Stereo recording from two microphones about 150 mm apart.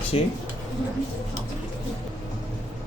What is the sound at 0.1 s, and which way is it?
Speech, 40° left (ahead or behind).